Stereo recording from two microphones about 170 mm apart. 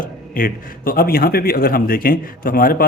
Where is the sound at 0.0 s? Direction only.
55° left (ahead or behind).